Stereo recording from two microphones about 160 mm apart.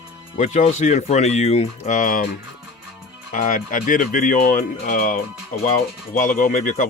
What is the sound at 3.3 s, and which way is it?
Speech, 60° left (ahead or behind).